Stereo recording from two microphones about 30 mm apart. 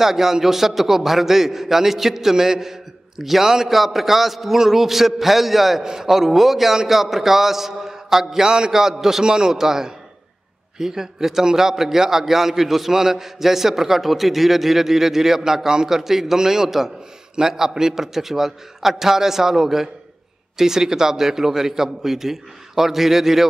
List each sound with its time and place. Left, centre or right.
0.0 s a man's voice: centre
9.2 s a man's voice: right; by 23.4 s centre